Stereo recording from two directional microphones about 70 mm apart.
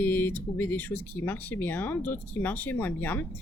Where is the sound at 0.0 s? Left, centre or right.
Left.